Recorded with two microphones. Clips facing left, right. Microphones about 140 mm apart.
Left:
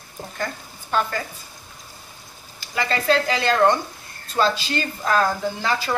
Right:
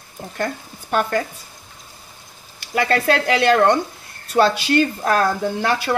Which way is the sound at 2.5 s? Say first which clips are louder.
Right 5 dB; 60° right (ahead or behind).